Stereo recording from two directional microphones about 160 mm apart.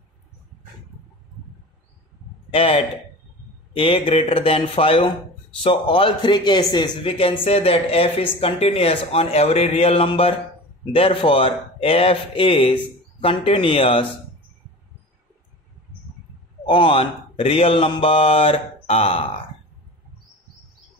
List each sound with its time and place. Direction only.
2.5 s speech: 35° left (ahead or behind)
16.6 s speech: 30° left (ahead or behind)